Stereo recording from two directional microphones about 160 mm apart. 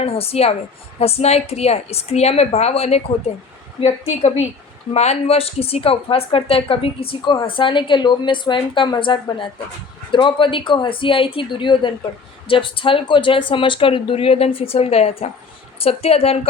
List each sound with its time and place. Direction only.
0.0 s a woman's voice: 40° left (ahead or behind)